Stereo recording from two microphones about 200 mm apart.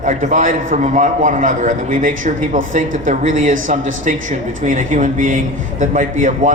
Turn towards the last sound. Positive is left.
turn(degrees=-40)  # may be behind; listen again after turning